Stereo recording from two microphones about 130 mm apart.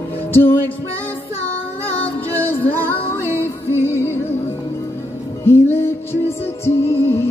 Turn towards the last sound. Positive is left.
turn(degrees=20)  # may be behind; listen again after turning